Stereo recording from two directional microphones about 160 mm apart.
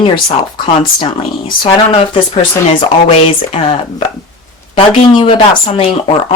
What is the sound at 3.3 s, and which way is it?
Speech, 40° left (ahead or behind).